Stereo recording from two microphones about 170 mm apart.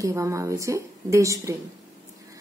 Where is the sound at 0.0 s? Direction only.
15° right (ahead or behind).